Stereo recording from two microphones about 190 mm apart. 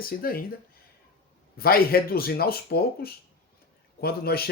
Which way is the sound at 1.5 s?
50° left (ahead or behind).